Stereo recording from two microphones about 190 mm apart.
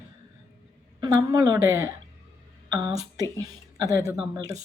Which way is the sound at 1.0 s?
20° right (ahead or behind).